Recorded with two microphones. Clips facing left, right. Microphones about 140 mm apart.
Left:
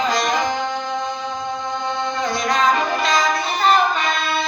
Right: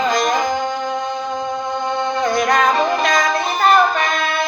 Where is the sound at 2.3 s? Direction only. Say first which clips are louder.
Right 2 dB; 50° right (ahead or behind).